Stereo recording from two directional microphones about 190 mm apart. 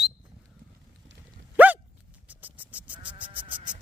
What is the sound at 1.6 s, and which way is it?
Dog, 10° right (ahead or behind).